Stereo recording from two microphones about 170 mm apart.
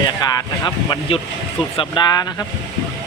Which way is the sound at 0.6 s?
30° left (ahead or behind).